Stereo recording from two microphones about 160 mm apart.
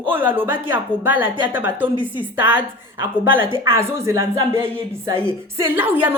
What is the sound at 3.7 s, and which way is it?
A woman's voice, 15° right (ahead or behind).